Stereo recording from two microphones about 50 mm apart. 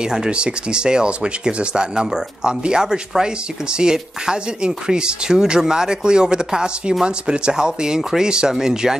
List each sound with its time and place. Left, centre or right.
0.0 s speech: centre